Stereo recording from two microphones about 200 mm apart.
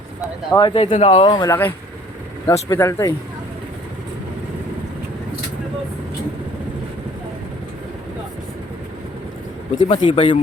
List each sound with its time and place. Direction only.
0.5 s speech: 25° left (ahead or behind)
1.2 s speech: 20° left (ahead or behind)
9.7 s speech: 25° left (ahead or behind)